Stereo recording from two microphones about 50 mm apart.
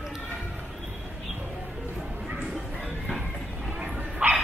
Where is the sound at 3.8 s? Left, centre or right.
Right.